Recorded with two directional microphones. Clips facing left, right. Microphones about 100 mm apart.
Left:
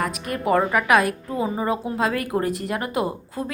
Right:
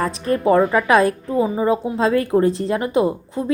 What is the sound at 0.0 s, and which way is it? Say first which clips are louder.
A woman's voice: right 6 dB; 30° right (ahead or behind).